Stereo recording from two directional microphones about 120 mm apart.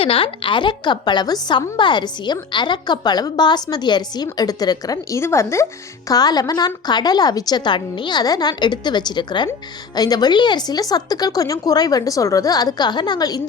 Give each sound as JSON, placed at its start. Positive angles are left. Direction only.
{"t": 0.0, "sound": "a woman's voice", "side_deg": 50}